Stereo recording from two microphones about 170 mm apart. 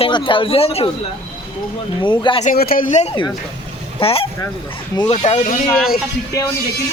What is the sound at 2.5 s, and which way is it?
A man's voice, 60° left (ahead or behind).